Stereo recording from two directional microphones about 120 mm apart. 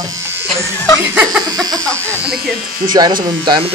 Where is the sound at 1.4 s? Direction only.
30° right (ahead or behind).